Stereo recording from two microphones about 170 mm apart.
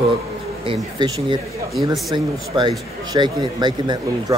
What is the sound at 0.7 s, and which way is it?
Speech, 25° right (ahead or behind).